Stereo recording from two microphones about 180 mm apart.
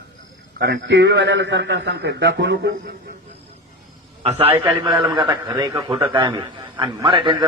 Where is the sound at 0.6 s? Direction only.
75° right (ahead or behind).